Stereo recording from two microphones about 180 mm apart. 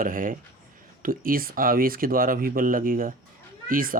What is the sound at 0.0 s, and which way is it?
Speech, 50° right (ahead or behind).